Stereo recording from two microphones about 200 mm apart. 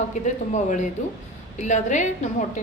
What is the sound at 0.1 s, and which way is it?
A woman's voice, 40° left (ahead or behind).